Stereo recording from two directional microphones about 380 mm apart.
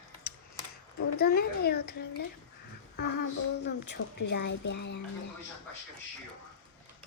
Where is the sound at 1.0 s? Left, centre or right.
Left.